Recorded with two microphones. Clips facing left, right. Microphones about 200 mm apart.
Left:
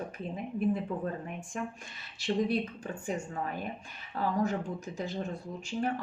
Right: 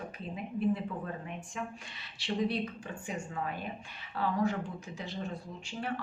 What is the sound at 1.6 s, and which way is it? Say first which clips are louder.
Speech: left 5 dB; 45° left (ahead or behind).